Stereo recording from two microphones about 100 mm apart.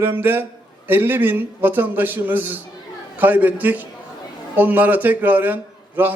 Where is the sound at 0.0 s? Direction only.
20° right (ahead or behind).